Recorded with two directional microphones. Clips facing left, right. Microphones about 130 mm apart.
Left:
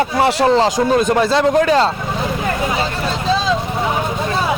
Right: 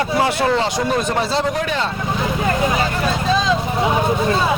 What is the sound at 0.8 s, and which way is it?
Speech, 50° left (ahead or behind).